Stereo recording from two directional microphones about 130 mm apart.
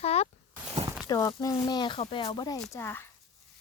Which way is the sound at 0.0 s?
55° left (ahead or behind).